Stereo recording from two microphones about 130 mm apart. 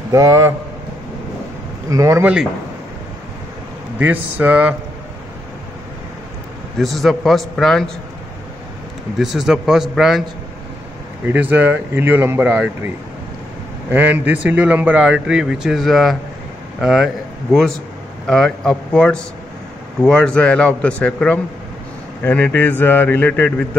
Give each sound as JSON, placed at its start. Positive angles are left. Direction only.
{"t": 0.1, "sound": "a man's voice", "side_deg": -25}
{"t": 1.9, "sound": "a man's voice", "side_deg": -25}
{"t": 4.0, "sound": "speech", "side_deg": -10}
{"t": 6.8, "sound": "a man's voice", "side_deg": 0}
{"t": 9.2, "sound": "a man's voice", "side_deg": 0}
{"t": 11.2, "sound": "a man's voice", "side_deg": -15}